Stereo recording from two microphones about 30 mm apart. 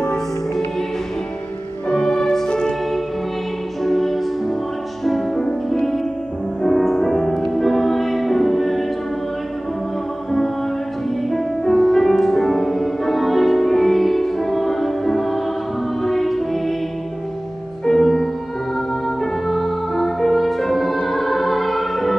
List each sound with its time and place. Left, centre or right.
1.9 s music: left
3.8 s music: centre
11.2 s music: centre
17.8 s music: centre